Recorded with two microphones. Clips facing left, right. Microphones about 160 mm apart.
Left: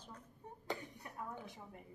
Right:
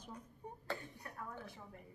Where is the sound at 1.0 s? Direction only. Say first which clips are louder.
Left 2 dB; 15° left (ahead or behind).